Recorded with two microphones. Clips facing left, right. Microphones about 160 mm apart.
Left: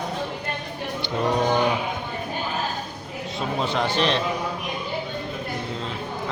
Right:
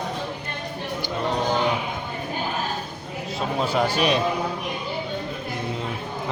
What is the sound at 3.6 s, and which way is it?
Speech, 5° right (ahead or behind).